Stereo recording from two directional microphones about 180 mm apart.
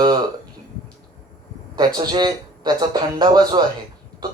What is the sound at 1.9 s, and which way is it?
Speech, 25° right (ahead or behind).